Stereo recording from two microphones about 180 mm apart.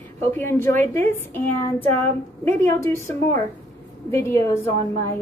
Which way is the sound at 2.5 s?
15° left (ahead or behind).